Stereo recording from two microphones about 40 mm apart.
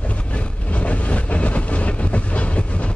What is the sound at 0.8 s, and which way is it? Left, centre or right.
Train, left.